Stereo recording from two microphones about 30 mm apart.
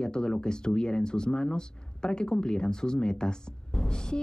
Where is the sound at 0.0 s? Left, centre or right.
Left.